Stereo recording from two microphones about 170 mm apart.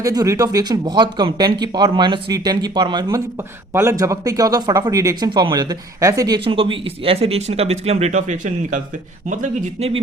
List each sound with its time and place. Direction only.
0.0 s speech: 20° right (ahead or behind); by 9.9 s 50° right (ahead or behind)